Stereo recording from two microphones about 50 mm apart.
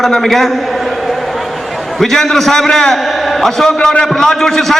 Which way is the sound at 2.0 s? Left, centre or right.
Centre.